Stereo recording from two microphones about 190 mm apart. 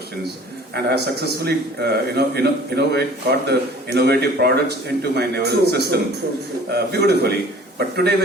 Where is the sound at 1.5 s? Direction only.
60° right (ahead or behind).